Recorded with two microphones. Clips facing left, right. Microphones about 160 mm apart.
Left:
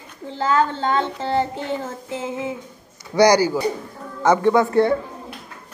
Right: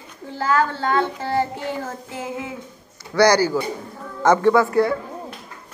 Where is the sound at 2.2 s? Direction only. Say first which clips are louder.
Left 3 dB; 20° left (ahead or behind).